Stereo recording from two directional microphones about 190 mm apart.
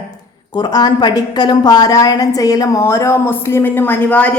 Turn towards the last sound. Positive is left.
turn(degrees=10)  # may be behind; listen again after turning